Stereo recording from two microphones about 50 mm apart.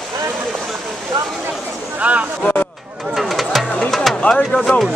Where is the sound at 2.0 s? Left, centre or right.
Right.